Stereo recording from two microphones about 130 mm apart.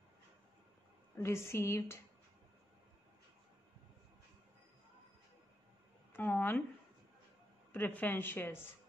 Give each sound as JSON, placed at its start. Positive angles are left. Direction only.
{"t": 1.1, "sound": "speech", "side_deg": 20}
{"t": 6.1, "sound": "speech", "side_deg": 15}
{"t": 7.7, "sound": "speech", "side_deg": 15}